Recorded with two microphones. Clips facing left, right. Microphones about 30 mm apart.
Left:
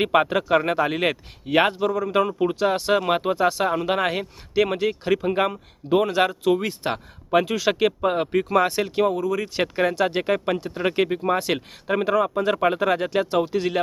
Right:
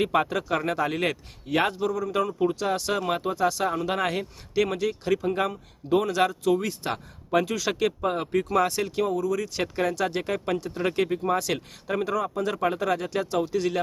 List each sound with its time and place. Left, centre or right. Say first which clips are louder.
0.0 s speech: left 4 dB; left